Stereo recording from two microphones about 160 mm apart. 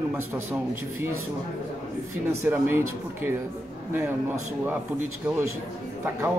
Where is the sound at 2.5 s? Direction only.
10° right (ahead or behind).